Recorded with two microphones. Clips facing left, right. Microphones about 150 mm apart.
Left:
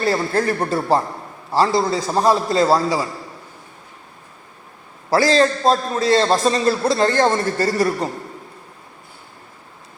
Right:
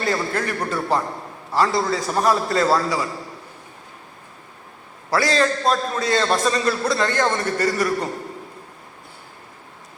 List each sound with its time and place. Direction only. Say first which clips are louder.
0.0 s a man's voice: left 4 dB; 30° left (ahead or behind)
5.1 s a man's voice: left 4 dB; 30° left (ahead or behind)